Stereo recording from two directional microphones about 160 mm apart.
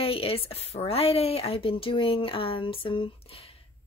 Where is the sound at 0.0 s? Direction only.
35° left (ahead or behind).